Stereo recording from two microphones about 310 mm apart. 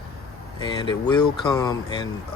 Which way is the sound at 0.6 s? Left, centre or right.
Centre.